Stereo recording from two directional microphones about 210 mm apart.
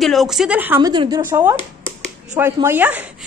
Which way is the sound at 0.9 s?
20° right (ahead or behind).